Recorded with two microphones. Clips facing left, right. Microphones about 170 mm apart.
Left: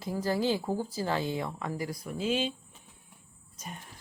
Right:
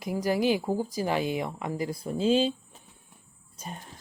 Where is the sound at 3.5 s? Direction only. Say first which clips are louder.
Right 3 dB; 30° right (ahead or behind).